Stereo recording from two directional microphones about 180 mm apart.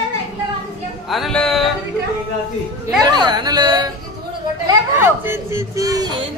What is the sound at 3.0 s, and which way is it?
Speech, 20° right (ahead or behind).